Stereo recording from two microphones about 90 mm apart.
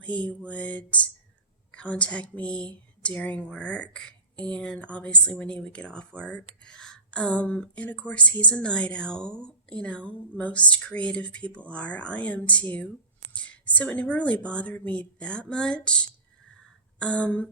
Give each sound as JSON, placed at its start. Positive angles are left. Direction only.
{"t": 0.0, "sound": "speech", "side_deg": 15}